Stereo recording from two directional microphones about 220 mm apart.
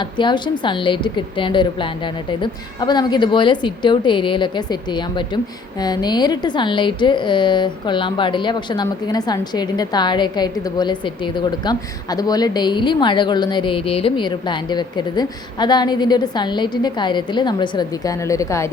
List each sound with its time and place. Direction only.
0.0 s a woman's voice: 20° left (ahead or behind)